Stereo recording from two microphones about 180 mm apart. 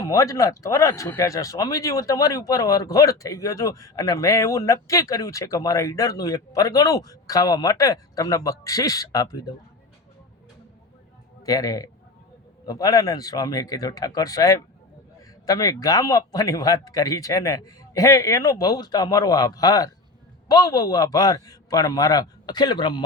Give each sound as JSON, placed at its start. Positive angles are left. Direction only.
{"t": 0.0, "sound": "speech", "side_deg": 15}
{"t": 11.4, "sound": "speech", "side_deg": 20}